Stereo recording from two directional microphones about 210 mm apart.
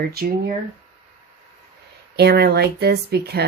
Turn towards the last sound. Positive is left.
turn(degrees=-50)  # may be behind; listen again after turning